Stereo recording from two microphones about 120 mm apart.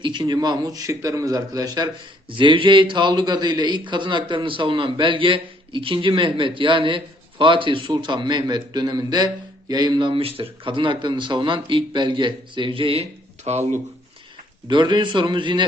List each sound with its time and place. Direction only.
0.0 s a man's voice: 40° right (ahead or behind); by 13.7 s 65° right (ahead or behind)
14.7 s a man's voice: 40° right (ahead or behind)